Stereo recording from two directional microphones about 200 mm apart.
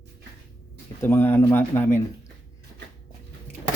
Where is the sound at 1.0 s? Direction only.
10° left (ahead or behind).